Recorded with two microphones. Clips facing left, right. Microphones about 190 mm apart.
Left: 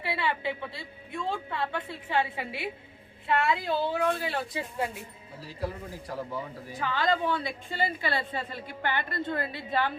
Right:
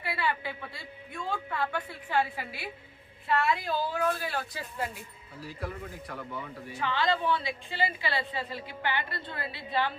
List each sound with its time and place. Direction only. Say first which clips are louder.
0.0 s a woman's voice: left 2 dB; 25° left (ahead or behind); by 9.9 s 45° left (ahead or behind)